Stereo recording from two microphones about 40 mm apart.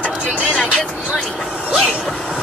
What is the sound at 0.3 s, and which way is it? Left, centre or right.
Vehicle, right.